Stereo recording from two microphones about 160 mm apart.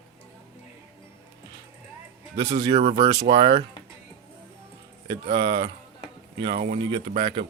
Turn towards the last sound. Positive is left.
turn(degrees=-55)  # may be behind; listen again after turning